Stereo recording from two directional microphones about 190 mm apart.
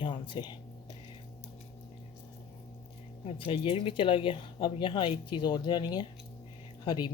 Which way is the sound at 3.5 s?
30° left (ahead or behind).